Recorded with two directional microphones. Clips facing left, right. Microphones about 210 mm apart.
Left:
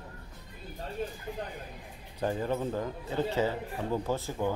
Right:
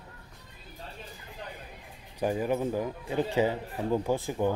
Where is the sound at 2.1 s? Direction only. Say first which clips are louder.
Right 3 dB; 10° right (ahead or behind).